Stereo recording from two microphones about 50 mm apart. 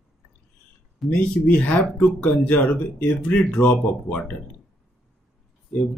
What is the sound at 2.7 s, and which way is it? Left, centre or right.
Speech, left.